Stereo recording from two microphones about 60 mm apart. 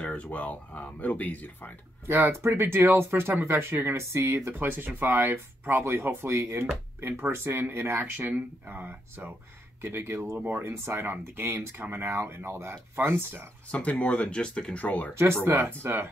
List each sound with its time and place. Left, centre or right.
0.0 s speech: left
2.0 s speech: right
6.3 s speech: right
8.0 s speech: right
13.7 s speech: left
15.4 s speech: right